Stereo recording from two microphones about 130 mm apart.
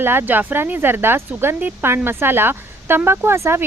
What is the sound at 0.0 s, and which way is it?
Speech, 15° right (ahead or behind).